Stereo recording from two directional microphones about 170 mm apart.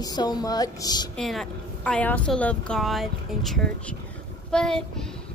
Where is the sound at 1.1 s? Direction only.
Centre (ahead or behind).